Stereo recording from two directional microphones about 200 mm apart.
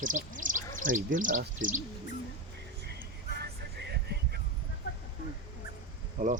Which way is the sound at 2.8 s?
55° right (ahead or behind).